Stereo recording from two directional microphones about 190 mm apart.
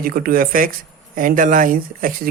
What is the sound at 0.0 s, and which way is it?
Speech, 50° right (ahead or behind).